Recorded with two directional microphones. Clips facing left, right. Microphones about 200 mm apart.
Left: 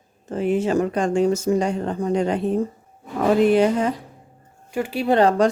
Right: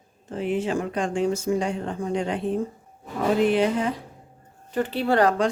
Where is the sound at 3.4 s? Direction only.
45° left (ahead or behind).